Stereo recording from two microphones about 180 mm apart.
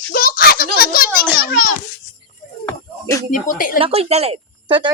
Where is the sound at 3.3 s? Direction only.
50° left (ahead or behind).